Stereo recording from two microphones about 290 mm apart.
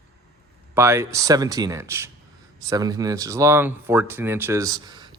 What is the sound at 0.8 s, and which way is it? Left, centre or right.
Speech, centre.